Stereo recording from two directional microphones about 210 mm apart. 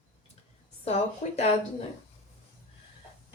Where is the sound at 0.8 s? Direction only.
30° left (ahead or behind).